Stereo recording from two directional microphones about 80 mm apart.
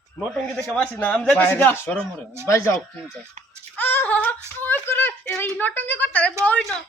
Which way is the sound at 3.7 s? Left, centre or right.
Left.